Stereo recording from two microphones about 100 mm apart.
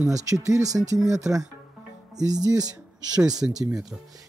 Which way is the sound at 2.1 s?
40° right (ahead or behind).